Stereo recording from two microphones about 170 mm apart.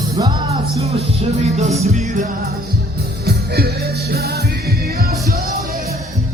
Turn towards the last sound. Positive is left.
turn(degrees=-65)  # may be behind; listen again after turning